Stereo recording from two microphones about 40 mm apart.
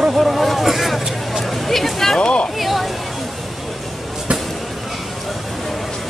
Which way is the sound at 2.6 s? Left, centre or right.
Centre.